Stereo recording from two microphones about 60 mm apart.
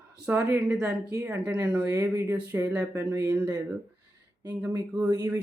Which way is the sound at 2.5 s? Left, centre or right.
Right.